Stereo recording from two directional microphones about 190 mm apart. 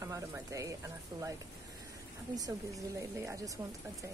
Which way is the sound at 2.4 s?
20° right (ahead or behind).